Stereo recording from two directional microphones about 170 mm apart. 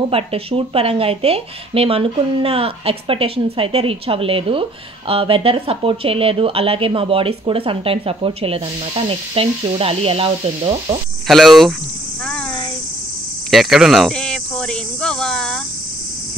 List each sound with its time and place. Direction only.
0.1 s speech: 35° right (ahead or behind)
11.2 s speech: centre (ahead or behind)
13.5 s speech: centre (ahead or behind)